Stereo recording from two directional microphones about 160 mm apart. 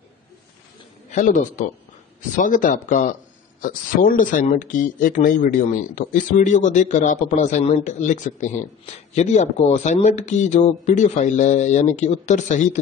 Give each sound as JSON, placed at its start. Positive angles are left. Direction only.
{"t": 1.1, "sound": "speech", "side_deg": 55}